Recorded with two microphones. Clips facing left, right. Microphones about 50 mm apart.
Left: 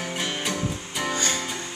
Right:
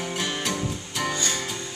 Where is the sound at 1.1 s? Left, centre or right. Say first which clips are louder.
Left 4 dB; left.